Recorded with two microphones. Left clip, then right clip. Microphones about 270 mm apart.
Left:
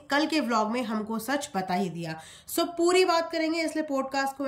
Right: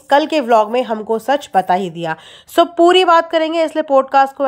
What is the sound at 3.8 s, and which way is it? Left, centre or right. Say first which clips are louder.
Speech: right 17 dB; right.